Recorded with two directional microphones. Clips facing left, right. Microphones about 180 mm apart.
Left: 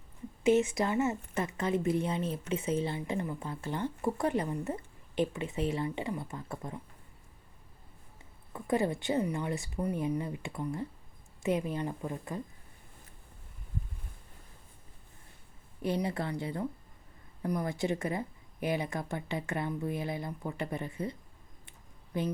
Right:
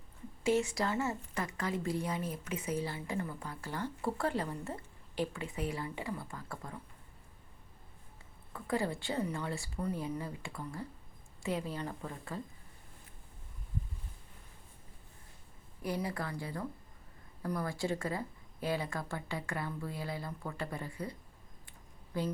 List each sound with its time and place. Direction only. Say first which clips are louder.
0.4 s a woman's voice: left 5 dB; 20° left (ahead or behind)
8.5 s a woman's voice: left 5 dB; 20° left (ahead or behind)
15.8 s a woman's voice: left 4 dB; 25° left (ahead or behind)
21.7 s a sound: left 4 dB; 20° left (ahead or behind)